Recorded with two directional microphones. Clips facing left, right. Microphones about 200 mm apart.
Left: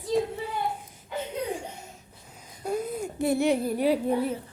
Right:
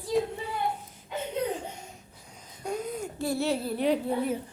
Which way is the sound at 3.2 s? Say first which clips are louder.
Left 5 dB; 20° left (ahead or behind).